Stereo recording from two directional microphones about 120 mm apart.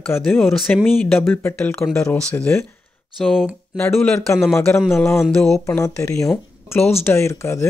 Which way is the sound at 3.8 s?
20° left (ahead or behind).